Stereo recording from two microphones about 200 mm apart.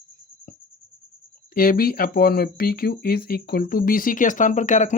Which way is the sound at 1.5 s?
45° left (ahead or behind).